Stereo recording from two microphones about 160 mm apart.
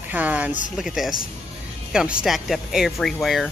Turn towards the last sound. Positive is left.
turn(degrees=0)  # may be behind; listen again after turning